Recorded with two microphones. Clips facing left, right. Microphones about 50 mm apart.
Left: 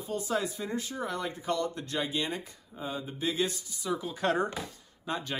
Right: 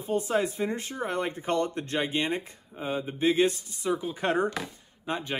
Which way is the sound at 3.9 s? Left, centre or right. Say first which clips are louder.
Right 1 dB; right.